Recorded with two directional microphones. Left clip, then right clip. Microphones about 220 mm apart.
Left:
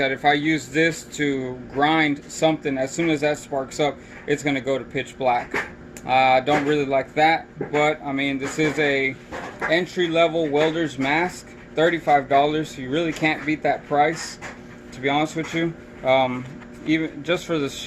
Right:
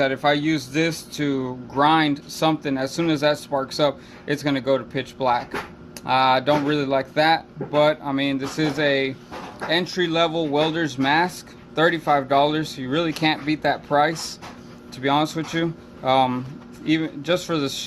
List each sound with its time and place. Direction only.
0.0 s speech: 45° right (ahead or behind)